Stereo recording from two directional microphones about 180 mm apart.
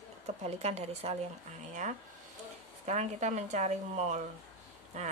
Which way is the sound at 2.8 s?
40° right (ahead or behind).